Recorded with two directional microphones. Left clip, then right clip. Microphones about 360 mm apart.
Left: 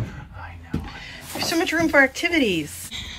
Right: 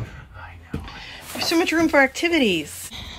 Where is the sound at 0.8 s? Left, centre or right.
Centre.